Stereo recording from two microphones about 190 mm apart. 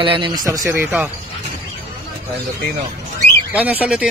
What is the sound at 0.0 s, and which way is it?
Speech, 25° right (ahead or behind).